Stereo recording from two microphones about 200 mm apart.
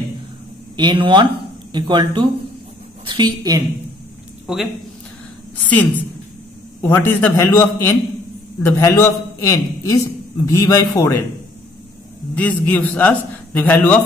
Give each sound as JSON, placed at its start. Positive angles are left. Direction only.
{"t": 0.7, "sound": "a woman's voice", "side_deg": -25}
{"t": 4.5, "sound": "speech", "side_deg": -5}
{"t": 5.6, "sound": "a woman's voice", "side_deg": 10}
{"t": 12.4, "sound": "a man's voice", "side_deg": 10}